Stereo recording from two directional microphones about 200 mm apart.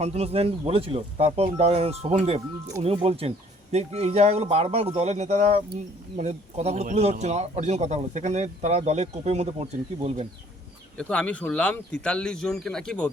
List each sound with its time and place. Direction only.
0.0 s a man's voice: 30° right (ahead or behind)
11.1 s a man's voice: 5° left (ahead or behind)